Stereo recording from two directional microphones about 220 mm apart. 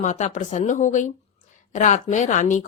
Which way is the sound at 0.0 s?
35° left (ahead or behind).